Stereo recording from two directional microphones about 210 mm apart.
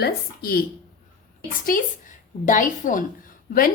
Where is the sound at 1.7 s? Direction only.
40° left (ahead or behind).